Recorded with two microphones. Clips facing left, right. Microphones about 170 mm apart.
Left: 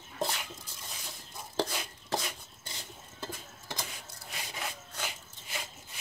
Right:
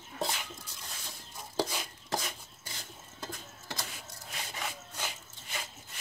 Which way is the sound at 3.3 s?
10° left (ahead or behind).